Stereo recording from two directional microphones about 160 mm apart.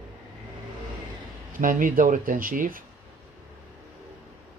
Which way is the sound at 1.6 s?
55° right (ahead or behind).